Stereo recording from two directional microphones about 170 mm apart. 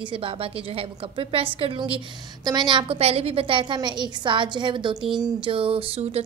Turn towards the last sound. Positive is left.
turn(degrees=-30)  # may be behind; listen again after turning